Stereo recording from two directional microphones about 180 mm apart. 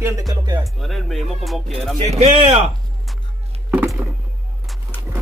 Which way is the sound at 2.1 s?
35° right (ahead or behind).